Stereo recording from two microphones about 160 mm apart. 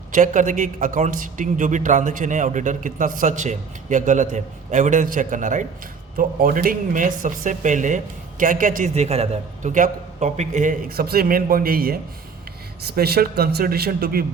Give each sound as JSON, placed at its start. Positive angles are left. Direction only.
{"t": 0.1, "sound": "a man's voice", "side_deg": -50}
{"t": 12.8, "sound": "speech", "side_deg": -80}